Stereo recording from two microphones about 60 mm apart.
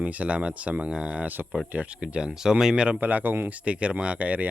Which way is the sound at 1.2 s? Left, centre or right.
Right.